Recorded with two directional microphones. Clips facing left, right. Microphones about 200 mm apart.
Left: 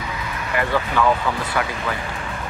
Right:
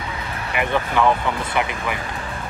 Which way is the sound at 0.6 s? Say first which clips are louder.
Right 1 dB; 20° right (ahead or behind).